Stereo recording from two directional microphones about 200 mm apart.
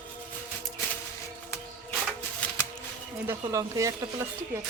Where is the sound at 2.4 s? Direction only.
5° left (ahead or behind).